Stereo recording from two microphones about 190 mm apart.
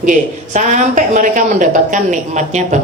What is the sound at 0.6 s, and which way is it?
A woman's voice, 40° right (ahead or behind).